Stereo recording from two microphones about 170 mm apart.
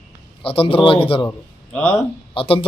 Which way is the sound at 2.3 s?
35° left (ahead or behind).